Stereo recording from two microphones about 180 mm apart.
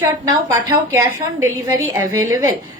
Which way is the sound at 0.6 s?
15° right (ahead or behind).